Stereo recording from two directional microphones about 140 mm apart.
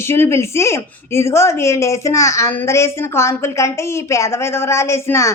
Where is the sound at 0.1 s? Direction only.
15° left (ahead or behind).